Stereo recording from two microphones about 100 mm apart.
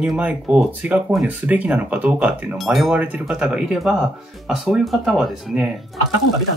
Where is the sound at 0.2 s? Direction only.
15° right (ahead or behind).